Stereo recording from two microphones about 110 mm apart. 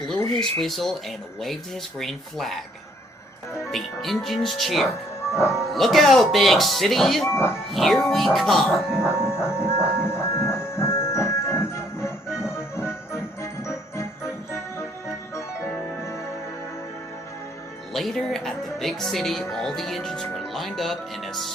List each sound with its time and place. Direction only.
0.6 s speech: centre (ahead or behind)
3.7 s speech: centre (ahead or behind)
5.3 s speech: 25° left (ahead or behind)
5.7 s speech: centre (ahead or behind)
7.3 s speech: 20° left (ahead or behind)
7.7 s speech: centre (ahead or behind)
9.0 s music: 20° left (ahead or behind)
17.9 s speech: centre (ahead or behind)